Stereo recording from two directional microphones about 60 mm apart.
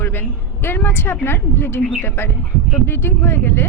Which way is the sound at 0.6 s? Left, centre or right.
Left.